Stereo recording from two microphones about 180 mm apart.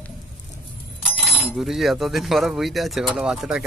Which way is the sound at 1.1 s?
Centre (ahead or behind).